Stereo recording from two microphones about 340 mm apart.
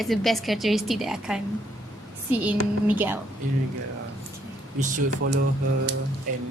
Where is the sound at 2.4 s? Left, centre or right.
Centre.